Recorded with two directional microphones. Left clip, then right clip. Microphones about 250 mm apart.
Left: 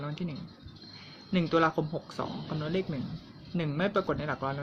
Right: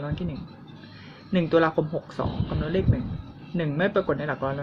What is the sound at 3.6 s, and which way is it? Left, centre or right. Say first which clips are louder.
Speech: right 5 dB; centre.